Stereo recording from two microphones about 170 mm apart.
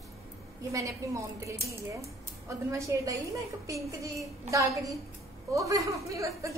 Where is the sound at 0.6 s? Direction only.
20° right (ahead or behind).